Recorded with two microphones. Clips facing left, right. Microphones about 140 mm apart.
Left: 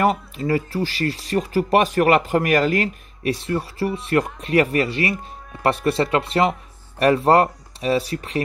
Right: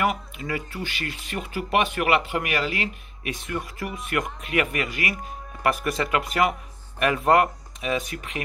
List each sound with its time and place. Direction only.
0.0 s speech: 35° left (ahead or behind)